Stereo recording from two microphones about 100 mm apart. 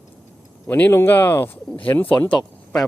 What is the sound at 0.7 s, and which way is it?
Speech, 20° left (ahead or behind).